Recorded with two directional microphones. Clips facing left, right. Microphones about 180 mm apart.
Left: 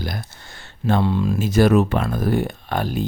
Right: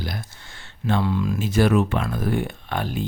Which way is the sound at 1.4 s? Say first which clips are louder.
Left 4 dB; 40° left (ahead or behind).